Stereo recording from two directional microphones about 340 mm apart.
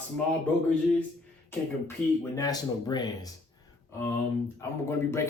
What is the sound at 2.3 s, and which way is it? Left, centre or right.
Speech, centre.